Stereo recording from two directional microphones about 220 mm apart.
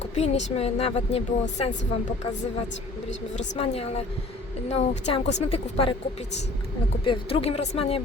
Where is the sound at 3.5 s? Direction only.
30° left (ahead or behind).